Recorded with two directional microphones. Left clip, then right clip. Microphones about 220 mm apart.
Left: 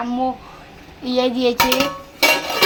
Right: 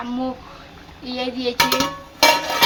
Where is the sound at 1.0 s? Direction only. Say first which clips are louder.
Left 7 dB; 20° left (ahead or behind).